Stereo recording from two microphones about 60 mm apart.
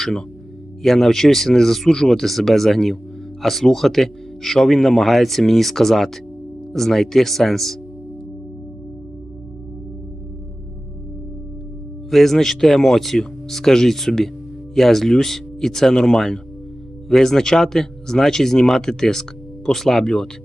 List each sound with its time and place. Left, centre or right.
0.0 s speech: centre
12.1 s speech: centre